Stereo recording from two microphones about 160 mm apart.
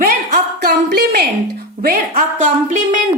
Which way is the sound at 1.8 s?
65° right (ahead or behind).